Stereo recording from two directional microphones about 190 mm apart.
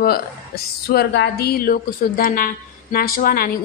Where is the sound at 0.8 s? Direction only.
60° left (ahead or behind).